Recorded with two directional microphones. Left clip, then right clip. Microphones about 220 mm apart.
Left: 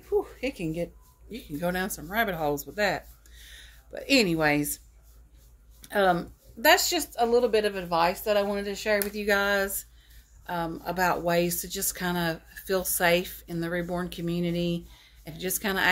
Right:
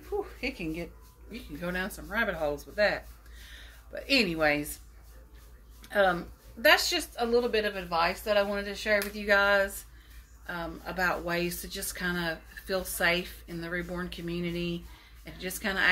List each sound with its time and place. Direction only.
0.2 s a sound: 55° left (ahead or behind)
1.3 s speech: 55° left (ahead or behind)
5.8 s speech: 55° left (ahead or behind)